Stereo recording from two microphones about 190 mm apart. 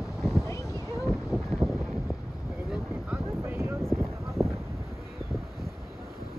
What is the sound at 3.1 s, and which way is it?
Boat, 10° right (ahead or behind).